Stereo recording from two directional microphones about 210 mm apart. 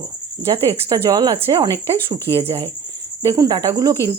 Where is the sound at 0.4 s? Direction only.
25° right (ahead or behind).